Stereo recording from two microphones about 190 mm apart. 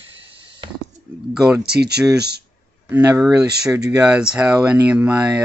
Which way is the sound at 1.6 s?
60° right (ahead or behind).